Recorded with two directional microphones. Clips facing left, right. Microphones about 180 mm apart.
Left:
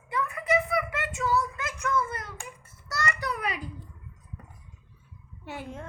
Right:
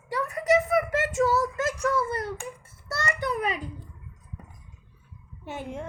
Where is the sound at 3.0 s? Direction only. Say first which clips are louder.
Right 3 dB; 25° right (ahead or behind).